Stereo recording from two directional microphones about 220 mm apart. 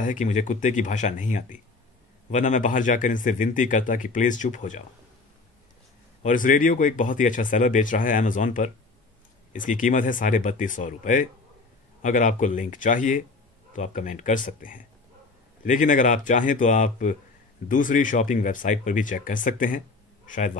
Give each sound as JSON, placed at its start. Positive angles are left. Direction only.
{"t": 0.0, "sound": "speech", "side_deg": 35}
{"t": 6.2, "sound": "speech", "side_deg": 35}